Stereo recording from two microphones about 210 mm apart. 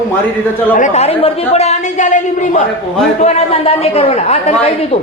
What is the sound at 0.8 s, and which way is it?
A man's voice, 30° left (ahead or behind).